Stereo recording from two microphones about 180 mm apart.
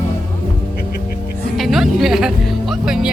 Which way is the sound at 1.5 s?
Centre (ahead or behind).